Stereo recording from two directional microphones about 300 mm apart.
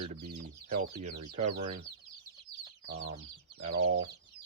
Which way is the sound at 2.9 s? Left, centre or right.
Right.